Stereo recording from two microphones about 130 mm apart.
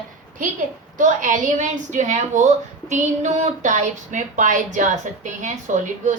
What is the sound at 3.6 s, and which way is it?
A woman's voice, 70° right (ahead or behind).